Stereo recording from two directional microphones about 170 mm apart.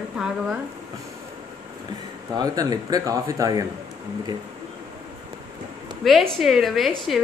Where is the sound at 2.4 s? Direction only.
20° right (ahead or behind).